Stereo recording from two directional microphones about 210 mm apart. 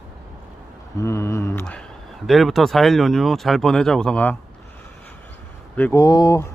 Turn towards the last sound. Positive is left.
turn(degrees=15)  # may be behind; listen again after turning